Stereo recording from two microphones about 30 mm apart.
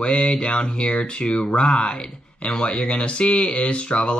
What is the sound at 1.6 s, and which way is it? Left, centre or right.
Speech, left.